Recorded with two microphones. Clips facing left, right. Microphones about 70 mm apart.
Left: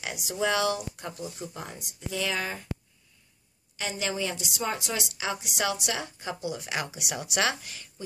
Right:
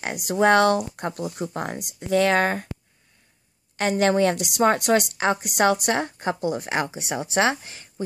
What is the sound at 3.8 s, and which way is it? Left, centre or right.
A woman's voice, right.